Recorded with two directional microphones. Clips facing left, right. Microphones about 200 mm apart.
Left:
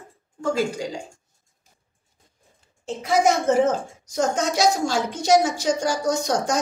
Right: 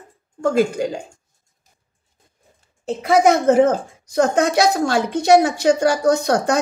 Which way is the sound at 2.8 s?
60° right (ahead or behind).